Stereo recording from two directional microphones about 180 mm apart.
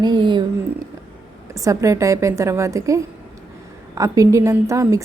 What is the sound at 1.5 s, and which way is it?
A woman's voice, 20° right (ahead or behind).